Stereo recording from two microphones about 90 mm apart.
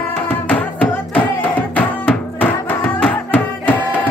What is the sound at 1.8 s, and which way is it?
Music, 15° left (ahead or behind).